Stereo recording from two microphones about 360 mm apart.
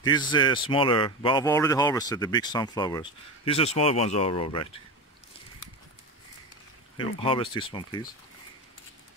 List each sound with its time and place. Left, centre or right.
0.0 s speech: centre
7.0 s speech: centre